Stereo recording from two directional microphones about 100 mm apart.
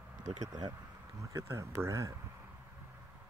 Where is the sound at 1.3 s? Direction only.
30° right (ahead or behind).